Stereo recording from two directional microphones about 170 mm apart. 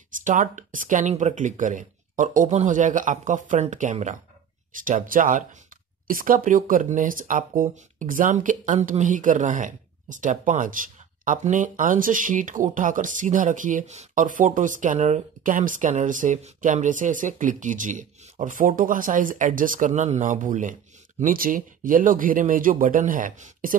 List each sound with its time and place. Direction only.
0.2 s speech: 50° right (ahead or behind)